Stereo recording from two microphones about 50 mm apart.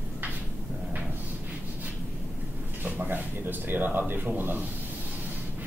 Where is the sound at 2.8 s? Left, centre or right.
Right.